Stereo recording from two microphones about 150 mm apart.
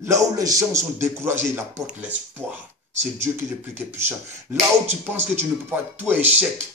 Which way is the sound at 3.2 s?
15° right (ahead or behind).